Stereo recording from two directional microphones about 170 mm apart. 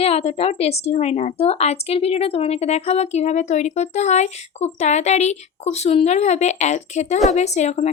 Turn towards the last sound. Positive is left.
turn(degrees=40)  # may be behind; listen again after turning